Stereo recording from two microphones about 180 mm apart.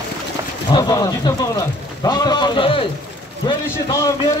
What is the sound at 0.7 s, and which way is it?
A man's voice, 20° left (ahead or behind).